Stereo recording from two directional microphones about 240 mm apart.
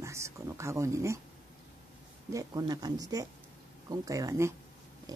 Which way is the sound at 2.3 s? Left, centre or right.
Centre.